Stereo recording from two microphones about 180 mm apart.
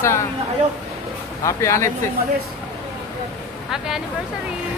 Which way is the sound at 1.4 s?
15° left (ahead or behind).